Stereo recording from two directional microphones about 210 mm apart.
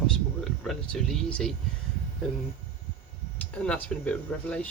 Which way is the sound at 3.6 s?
5° left (ahead or behind).